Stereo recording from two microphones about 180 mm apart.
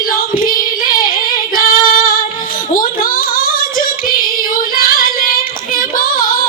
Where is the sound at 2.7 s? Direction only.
50° left (ahead or behind).